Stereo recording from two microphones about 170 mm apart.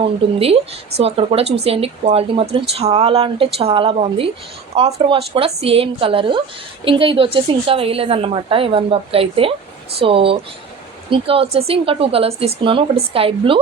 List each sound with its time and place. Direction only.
0.0 s speech: 35° right (ahead or behind)